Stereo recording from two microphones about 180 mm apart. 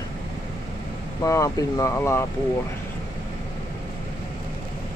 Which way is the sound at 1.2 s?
20° left (ahead or behind).